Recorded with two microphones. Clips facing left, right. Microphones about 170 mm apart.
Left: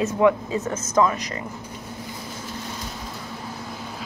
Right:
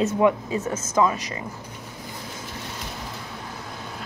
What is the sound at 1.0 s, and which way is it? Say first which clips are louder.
Speech: left 1 dB; 15° right (ahead or behind).